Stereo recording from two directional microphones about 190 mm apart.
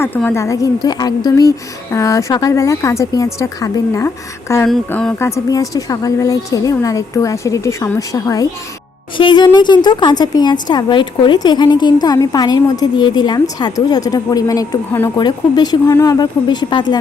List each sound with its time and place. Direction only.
0.0 s a woman's voice: 10° left (ahead or behind)
4.7 s a woman's voice: 5° left (ahead or behind); by 16.8 s 25° left (ahead or behind)